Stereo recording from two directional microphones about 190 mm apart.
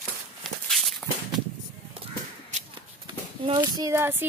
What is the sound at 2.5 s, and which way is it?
Whip, 40° right (ahead or behind).